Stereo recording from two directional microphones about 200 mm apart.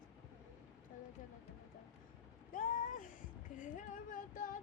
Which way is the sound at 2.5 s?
45° left (ahead or behind).